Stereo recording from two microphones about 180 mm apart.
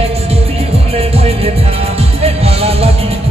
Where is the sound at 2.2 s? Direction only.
35° right (ahead or behind).